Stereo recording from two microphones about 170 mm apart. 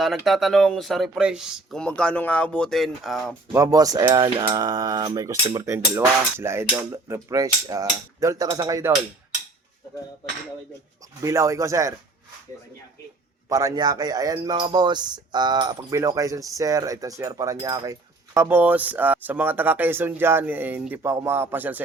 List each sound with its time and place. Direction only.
0.3 s speech: centre (ahead or behind)
3.5 s cutlery: 20° right (ahead or behind)
11.2 s speech: 20° right (ahead or behind)
13.5 s cutlery: 20° right (ahead or behind)
18.3 s speech: 10° right (ahead or behind)